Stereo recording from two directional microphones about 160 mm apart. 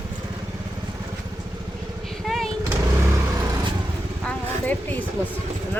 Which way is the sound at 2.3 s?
Centre (ahead or behind).